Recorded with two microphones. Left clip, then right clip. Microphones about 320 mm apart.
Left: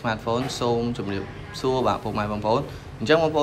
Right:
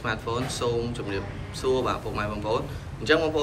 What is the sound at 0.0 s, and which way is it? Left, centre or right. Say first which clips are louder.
A man's voice: left 4 dB; centre.